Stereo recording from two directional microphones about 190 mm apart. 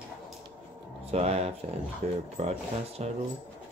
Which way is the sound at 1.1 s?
35° right (ahead or behind).